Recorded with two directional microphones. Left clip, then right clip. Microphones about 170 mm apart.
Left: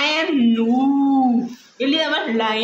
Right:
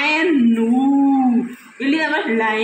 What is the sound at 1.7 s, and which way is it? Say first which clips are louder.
Speech: right 1 dB; 20° left (ahead or behind).